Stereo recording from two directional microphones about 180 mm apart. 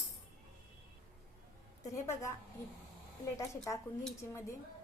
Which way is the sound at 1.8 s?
15° left (ahead or behind).